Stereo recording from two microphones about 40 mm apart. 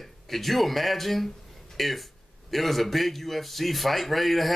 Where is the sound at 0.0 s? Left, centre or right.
Centre.